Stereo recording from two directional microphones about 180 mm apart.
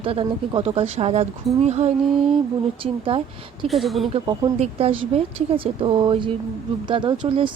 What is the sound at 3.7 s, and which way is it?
Speech, centre (ahead or behind).